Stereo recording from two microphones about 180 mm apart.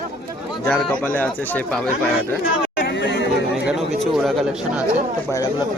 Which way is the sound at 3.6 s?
Centre (ahead or behind).